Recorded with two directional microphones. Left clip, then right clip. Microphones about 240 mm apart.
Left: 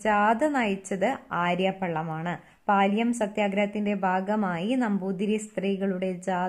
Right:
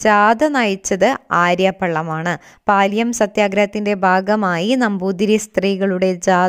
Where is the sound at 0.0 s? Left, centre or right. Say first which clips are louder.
Right 10 dB; right.